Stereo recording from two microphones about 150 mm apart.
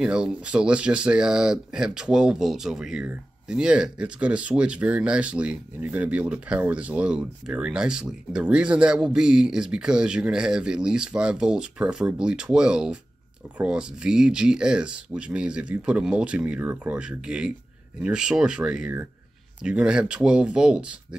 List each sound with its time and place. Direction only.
0.0 s speech: 5° right (ahead or behind)